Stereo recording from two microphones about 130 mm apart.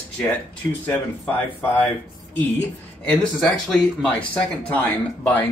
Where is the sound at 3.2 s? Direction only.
5° left (ahead or behind).